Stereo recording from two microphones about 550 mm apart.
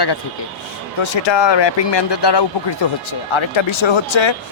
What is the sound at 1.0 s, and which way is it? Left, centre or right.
A man's voice, left.